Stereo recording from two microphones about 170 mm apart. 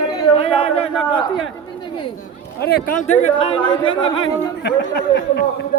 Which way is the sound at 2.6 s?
65° left (ahead or behind).